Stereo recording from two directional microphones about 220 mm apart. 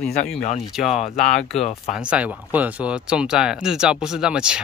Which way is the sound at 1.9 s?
5° right (ahead or behind).